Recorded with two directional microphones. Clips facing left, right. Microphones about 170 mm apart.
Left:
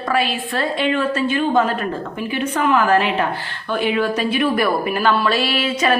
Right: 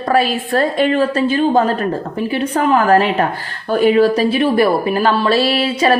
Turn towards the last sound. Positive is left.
turn(degrees=-35)  # may be behind; listen again after turning